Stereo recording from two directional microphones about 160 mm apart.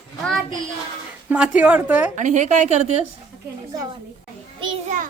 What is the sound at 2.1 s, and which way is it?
Speech, 50° right (ahead or behind).